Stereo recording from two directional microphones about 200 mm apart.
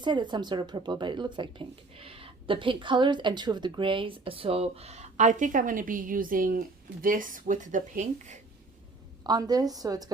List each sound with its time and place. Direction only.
0.0 s a woman's voice: 20° right (ahead or behind)
9.2 s a woman's voice: 20° right (ahead or behind)